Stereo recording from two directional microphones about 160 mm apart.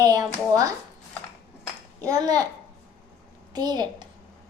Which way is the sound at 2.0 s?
20° right (ahead or behind).